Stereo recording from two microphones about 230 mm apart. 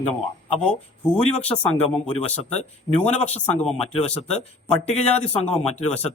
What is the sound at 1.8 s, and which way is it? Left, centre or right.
A man's voice, left.